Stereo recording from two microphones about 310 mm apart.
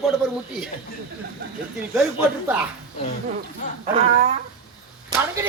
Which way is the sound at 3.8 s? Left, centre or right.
Right.